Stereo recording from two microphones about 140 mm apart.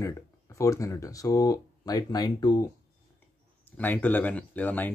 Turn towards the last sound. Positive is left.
turn(degrees=10)  # may be behind; listen again after turning